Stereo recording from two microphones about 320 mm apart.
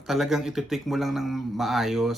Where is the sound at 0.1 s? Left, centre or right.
Centre.